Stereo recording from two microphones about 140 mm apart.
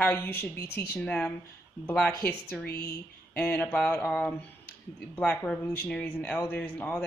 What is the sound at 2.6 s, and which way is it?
Speech, 90° left.